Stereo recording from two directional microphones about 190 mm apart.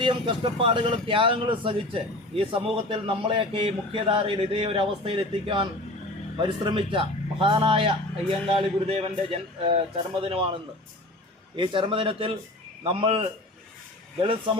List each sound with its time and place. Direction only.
0.0 s a man's voice: 25° right (ahead or behind)